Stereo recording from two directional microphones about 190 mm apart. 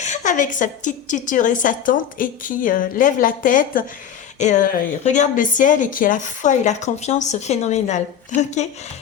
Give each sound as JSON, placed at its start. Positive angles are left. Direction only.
{"t": 0.0, "sound": "a woman's voice", "side_deg": 40}